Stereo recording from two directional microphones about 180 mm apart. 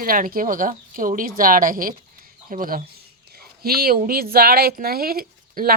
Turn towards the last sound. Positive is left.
turn(degrees=-55)  # may be behind; listen again after turning